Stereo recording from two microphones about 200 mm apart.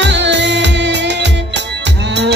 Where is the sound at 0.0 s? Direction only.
60° right (ahead or behind).